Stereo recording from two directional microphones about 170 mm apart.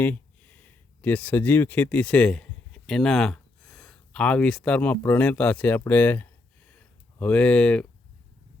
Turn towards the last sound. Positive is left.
turn(degrees=5)  # may be behind; listen again after turning